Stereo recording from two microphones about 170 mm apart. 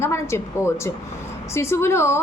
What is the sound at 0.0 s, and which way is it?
A woman's voice, 15° left (ahead or behind).